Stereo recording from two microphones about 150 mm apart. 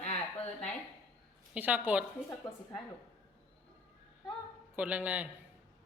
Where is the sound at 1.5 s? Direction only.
10° right (ahead or behind).